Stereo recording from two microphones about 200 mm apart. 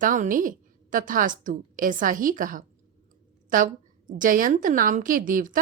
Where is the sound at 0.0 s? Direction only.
45° right (ahead or behind).